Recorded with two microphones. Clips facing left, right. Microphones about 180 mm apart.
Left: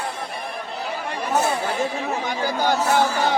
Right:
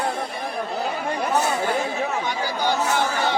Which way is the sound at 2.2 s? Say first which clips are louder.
Left 2 dB; 50° left (ahead or behind).